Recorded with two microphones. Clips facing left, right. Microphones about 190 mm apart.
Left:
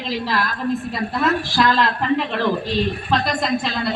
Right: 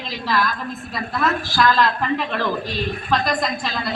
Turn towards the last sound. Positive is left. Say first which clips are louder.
# left 4 dB
turn(degrees=25)  # may be behind; listen again after turning